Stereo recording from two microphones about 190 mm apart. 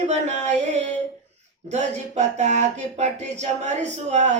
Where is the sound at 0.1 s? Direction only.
35° right (ahead or behind).